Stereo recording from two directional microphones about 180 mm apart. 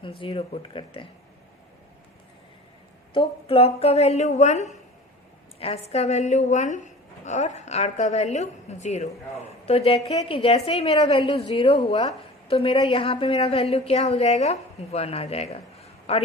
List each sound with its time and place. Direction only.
0.2 s speech: 30° left (ahead or behind)
3.1 s a woman's voice: 30° left (ahead or behind)